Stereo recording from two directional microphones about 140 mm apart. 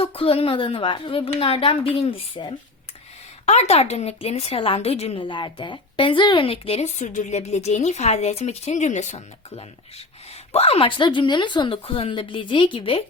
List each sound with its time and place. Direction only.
0.0 s a woman's voice: 40° left (ahead or behind)
3.4 s a woman's voice: 50° left (ahead or behind)